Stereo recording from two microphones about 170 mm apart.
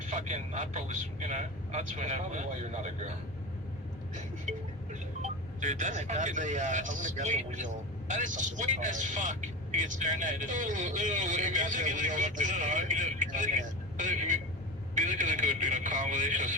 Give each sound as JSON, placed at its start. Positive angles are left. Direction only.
{"t": 0.1, "sound": "speech", "side_deg": -45}
{"t": 5.2, "sound": "a man's voice", "side_deg": -45}